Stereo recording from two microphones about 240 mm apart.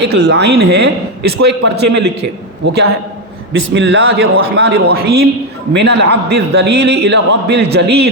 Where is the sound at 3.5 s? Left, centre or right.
Right.